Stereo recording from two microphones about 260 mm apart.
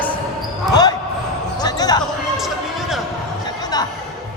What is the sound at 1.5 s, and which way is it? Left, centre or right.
Basketball bounce, centre.